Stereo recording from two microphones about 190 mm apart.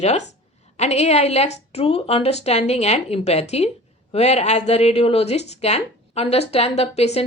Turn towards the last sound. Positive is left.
turn(degrees=35)  # may be behind; listen again after turning